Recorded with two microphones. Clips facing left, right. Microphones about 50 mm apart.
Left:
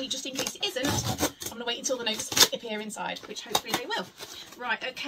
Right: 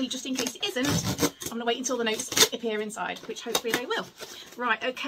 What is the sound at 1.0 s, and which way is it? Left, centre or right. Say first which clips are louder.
Speech: right 2 dB; right.